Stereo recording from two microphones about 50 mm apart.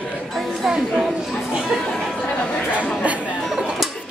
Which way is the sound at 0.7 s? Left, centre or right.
Centre.